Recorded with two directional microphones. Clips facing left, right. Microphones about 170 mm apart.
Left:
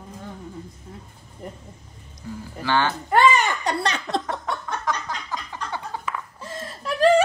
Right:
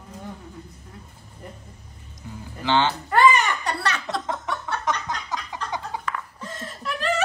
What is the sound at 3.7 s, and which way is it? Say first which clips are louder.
Speech: left 2 dB; 20° left (ahead or behind).